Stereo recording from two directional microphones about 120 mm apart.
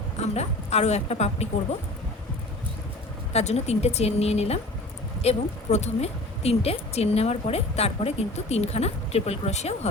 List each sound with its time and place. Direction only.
0.2 s a woman's voice: 65° left (ahead or behind)
3.3 s a woman's voice: 60° left (ahead or behind)